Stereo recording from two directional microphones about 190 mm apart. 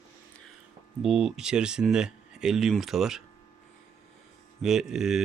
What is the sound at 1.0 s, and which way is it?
Speech, centre (ahead or behind).